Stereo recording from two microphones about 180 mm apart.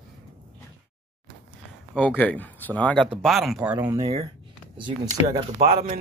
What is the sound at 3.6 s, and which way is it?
Speech, 10° right (ahead or behind).